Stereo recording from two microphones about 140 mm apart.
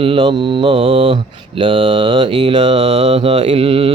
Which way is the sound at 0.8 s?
45° right (ahead or behind).